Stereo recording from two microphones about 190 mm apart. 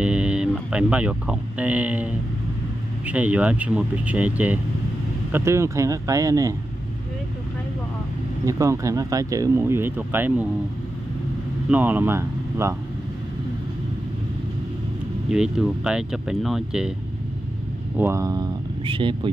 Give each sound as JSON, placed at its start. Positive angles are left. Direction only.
{"t": 0.0, "sound": "speech", "side_deg": -5}
{"t": 8.5, "sound": "speech", "side_deg": -15}
{"t": 11.7, "sound": "speech", "side_deg": -10}
{"t": 15.2, "sound": "speech", "side_deg": -5}
{"t": 17.9, "sound": "speech", "side_deg": -15}